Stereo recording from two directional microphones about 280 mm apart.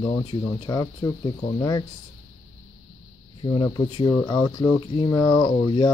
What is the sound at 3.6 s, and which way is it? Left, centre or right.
Speech, centre.